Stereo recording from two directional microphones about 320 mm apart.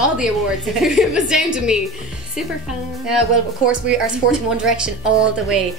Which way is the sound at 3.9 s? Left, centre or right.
Centre.